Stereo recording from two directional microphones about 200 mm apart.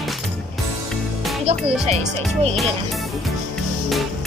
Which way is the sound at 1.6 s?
Centre (ahead or behind).